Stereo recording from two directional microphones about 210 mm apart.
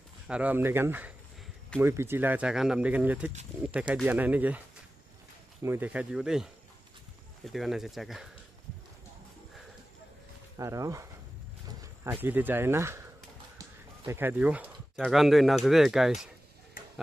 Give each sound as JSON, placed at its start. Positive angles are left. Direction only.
{"t": 0.3, "sound": "speech", "side_deg": -5}
{"t": 5.6, "sound": "speech", "side_deg": -10}
{"t": 10.6, "sound": "speech", "side_deg": -15}
{"t": 13.6, "sound": "bird", "side_deg": -10}
{"t": 15.0, "sound": "speech", "side_deg": 0}